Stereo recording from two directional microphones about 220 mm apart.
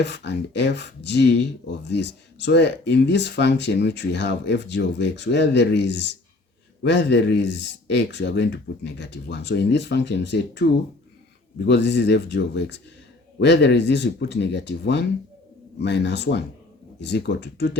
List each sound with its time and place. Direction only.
0.0 s speech: 50° left (ahead or behind)